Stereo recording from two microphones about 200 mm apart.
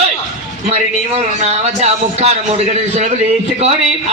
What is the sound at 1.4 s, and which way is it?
Speech, 35° right (ahead or behind).